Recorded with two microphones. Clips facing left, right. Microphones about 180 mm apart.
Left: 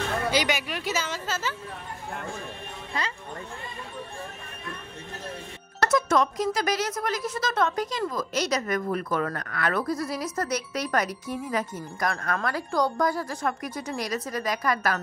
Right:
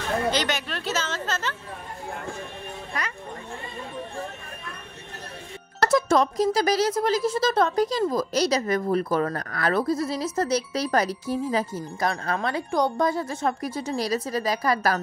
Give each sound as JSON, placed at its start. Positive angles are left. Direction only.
{"t": 0.3, "sound": "speech", "side_deg": 10}
{"t": 5.9, "sound": "a woman's voice", "side_deg": -30}